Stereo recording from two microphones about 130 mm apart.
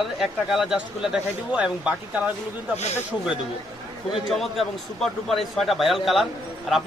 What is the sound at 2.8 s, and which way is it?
Speech, 60° left (ahead or behind).